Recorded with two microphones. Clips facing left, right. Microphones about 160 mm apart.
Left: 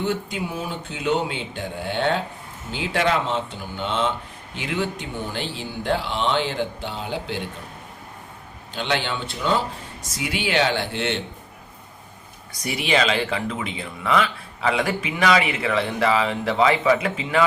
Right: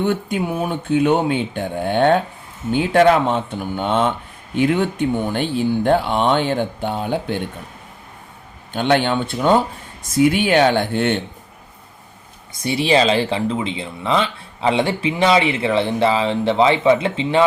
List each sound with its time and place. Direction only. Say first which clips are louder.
0.0 s speech: right 6 dB; 55° right (ahead or behind)
8.7 s speech: right 8 dB; 50° right (ahead or behind)
12.5 s speech: right 6 dB; 30° right (ahead or behind)